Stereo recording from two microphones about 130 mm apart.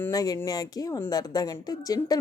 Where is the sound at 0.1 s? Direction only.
30° left (ahead or behind).